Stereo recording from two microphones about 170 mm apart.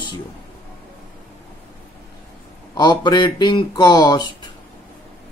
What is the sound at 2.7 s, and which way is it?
Mantra, 25° left (ahead or behind).